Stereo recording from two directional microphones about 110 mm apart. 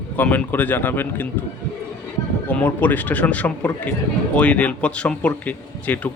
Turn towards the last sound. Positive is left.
turn(degrees=15)  # may be behind; listen again after turning